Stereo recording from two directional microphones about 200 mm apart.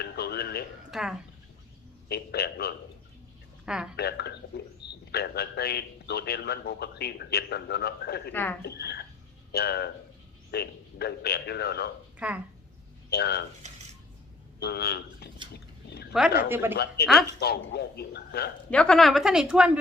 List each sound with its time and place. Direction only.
0.0 s a sound: 55° left (ahead or behind)
0.9 s speech: centre (ahead or behind)
2.0 s a man's voice: 55° left (ahead or behind)
3.9 s a man's voice: 55° left (ahead or behind)
8.3 s speech: 10° left (ahead or behind)
8.6 s a man's voice: 55° left (ahead or behind)
12.2 s a woman's voice: 5° right (ahead or behind)
13.1 s speech: 55° left (ahead or behind)
14.6 s a man's voice: 55° left (ahead or behind)
16.1 s a woman's voice: centre (ahead or behind)
16.7 s a woman's voice: 55° left (ahead or behind)
18.7 s a woman's voice: 5° left (ahead or behind)